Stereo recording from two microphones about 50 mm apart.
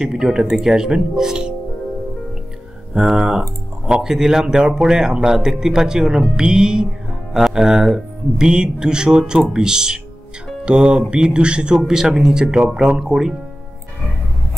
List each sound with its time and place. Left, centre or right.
0.1 s speech: centre
2.9 s speech: centre